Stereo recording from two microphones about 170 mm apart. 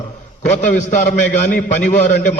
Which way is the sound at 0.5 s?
45° left (ahead or behind).